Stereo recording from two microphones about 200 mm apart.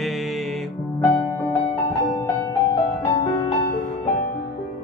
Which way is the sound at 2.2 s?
20° left (ahead or behind).